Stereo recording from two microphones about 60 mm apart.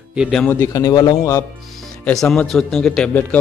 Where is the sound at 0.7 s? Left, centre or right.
Left.